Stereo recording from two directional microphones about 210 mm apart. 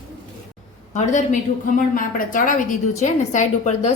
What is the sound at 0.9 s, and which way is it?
A woman's voice, 35° left (ahead or behind).